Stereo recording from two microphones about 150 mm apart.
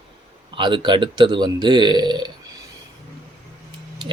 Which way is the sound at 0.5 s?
30° right (ahead or behind).